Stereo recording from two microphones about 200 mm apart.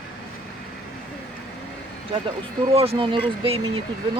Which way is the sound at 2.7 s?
30° right (ahead or behind).